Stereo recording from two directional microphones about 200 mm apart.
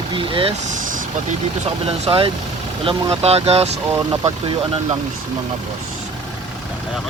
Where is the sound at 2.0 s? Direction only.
30° right (ahead or behind).